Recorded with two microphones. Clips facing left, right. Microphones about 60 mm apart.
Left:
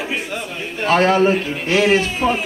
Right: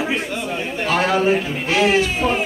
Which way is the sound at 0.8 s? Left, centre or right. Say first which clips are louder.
Left 4 dB; left.